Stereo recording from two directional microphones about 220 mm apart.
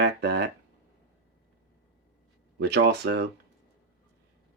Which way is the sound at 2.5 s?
50° right (ahead or behind).